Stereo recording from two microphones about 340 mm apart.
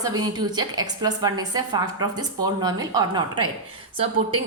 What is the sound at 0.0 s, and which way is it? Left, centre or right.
A woman's voice, centre.